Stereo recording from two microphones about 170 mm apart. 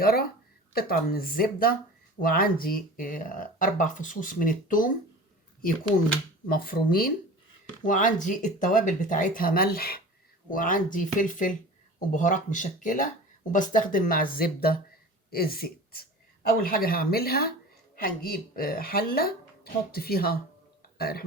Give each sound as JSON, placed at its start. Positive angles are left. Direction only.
{"t": 0.0, "sound": "speech", "side_deg": 60}
{"t": 6.5, "sound": "speech", "side_deg": 60}
{"t": 7.9, "sound": "speech", "side_deg": 50}